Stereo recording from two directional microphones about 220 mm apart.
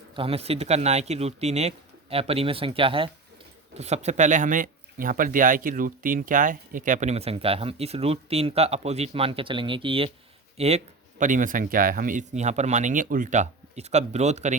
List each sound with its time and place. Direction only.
0.2 s speech: 25° right (ahead or behind)